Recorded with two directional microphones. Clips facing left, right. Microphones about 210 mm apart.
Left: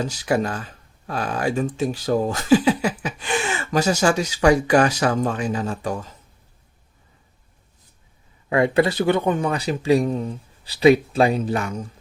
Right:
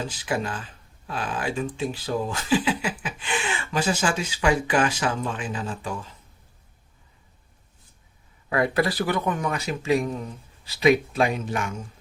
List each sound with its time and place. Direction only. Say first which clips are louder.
0.3 s speech: left 6 dB; 45° left (ahead or behind)
8.4 s speech: left 5 dB; 25° left (ahead or behind)